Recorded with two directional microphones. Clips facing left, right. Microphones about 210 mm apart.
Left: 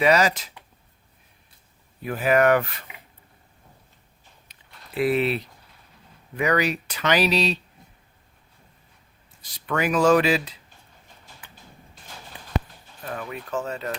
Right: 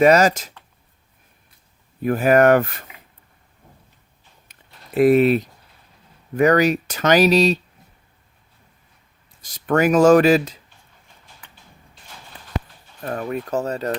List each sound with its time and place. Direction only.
0.0 s speech: 45° right (ahead or behind)
2.0 s speech: 45° right (ahead or behind)
4.9 s speech: 45° right (ahead or behind)
9.4 s speech: 45° right (ahead or behind)
13.0 s speech: 45° right (ahead or behind)